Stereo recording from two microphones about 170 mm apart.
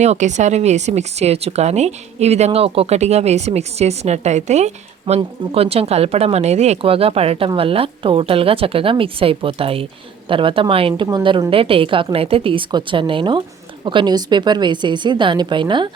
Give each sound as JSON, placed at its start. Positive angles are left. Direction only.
{"t": 0.0, "sound": "a woman's voice", "side_deg": -45}